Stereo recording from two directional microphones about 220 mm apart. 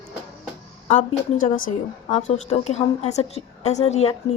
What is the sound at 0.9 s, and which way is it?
A woman's voice, 35° left (ahead or behind).